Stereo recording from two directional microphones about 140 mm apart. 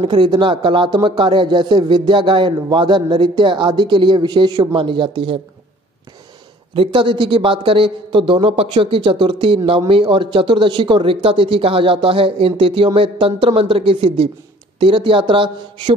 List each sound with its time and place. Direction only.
0.0 s a man's voice: 35° right (ahead or behind)
6.7 s a man's voice: 40° right (ahead or behind)